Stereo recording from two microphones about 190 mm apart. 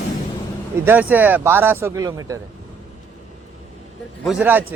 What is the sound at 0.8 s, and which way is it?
A man's voice, 10° right (ahead or behind).